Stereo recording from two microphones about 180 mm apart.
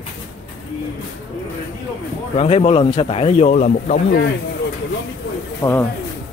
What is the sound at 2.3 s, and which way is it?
Speech, 35° left (ahead or behind).